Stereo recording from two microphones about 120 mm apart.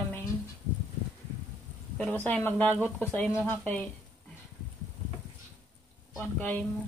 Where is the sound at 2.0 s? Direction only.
15° left (ahead or behind).